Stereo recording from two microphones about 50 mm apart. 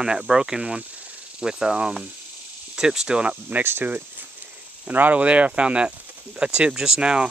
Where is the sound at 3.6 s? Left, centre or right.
Right.